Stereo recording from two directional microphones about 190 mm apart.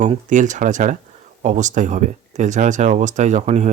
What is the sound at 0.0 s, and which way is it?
Speech, 40° right (ahead or behind).